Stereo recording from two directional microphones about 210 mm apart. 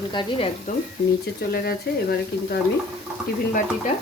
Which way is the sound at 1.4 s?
50° left (ahead or behind).